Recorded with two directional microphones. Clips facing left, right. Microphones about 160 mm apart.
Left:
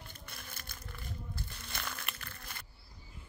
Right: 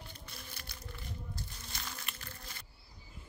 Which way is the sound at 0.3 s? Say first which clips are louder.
Even; 55° left (ahead or behind).